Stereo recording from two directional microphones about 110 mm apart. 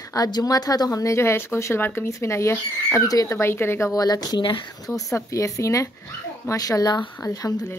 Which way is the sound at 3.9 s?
35° left (ahead or behind).